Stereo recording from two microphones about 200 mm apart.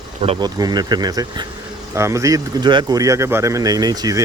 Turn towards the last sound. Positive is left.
turn(degrees=-20)  # may be behind; listen again after turning